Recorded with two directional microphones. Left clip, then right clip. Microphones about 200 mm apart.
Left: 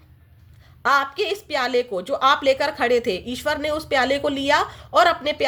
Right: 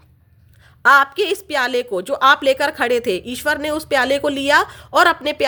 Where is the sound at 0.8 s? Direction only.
35° right (ahead or behind).